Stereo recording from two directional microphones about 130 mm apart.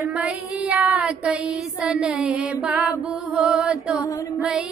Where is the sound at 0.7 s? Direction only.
5° right (ahead or behind).